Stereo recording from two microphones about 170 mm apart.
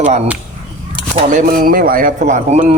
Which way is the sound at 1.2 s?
50° right (ahead or behind).